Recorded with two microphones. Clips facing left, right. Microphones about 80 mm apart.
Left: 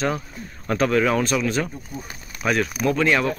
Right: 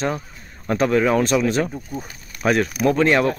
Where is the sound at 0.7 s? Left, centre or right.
Right.